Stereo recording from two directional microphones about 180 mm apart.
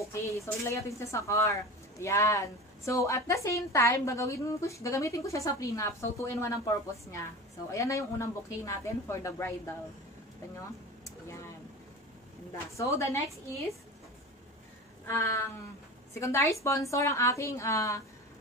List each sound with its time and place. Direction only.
0.1 s speech: 15° left (ahead or behind)
12.7 s speech: 15° left (ahead or behind)
15.0 s a woman's voice: 15° left (ahead or behind)